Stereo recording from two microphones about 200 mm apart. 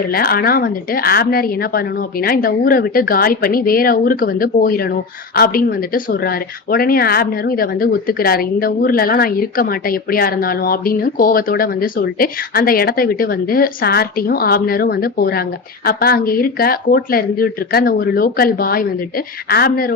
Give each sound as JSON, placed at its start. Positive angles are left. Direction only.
{"t": 0.1, "sound": "a woman's voice", "side_deg": 50}